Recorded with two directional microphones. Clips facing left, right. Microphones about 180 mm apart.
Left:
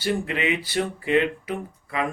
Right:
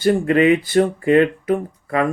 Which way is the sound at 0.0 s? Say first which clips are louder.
Right 10 dB; 45° right (ahead or behind).